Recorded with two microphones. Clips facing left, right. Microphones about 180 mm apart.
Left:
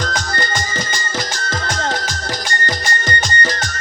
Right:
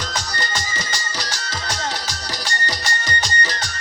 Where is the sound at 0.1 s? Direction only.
50° left (ahead or behind).